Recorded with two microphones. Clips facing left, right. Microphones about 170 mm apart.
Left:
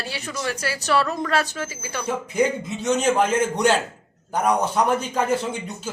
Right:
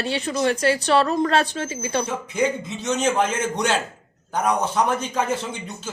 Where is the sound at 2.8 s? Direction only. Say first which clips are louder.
Left 2 dB; 10° left (ahead or behind).